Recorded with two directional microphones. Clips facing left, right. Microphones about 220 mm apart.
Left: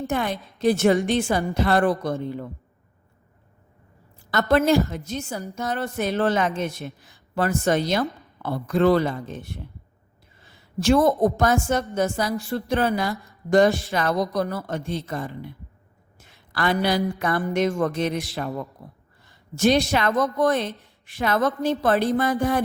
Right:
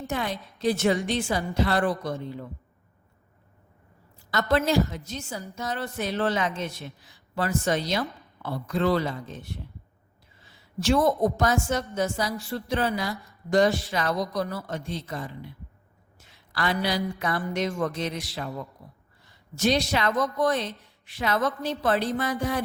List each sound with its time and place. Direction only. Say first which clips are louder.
0.1 s speech: left 1 dB; 50° left (ahead or behind)
4.3 s speech: left 5 dB; 55° left (ahead or behind)
10.5 s a woman's voice: left 4 dB; 50° left (ahead or behind)
16.2 s a sound: left 4 dB; 55° left (ahead or behind)
17.2 s speech: left 5 dB; 50° left (ahead or behind)